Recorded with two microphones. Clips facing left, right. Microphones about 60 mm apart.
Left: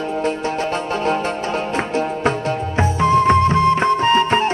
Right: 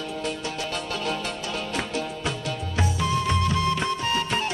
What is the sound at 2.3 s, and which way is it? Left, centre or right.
Music, left.